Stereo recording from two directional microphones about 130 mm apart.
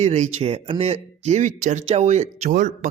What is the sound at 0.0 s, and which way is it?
Speech, 60° right (ahead or behind).